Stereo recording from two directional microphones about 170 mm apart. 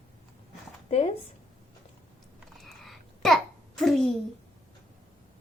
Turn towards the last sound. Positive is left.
turn(degrees=0)  # may be behind; listen again after turning